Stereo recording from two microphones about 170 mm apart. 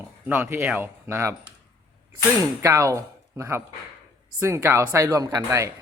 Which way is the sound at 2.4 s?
20° right (ahead or behind).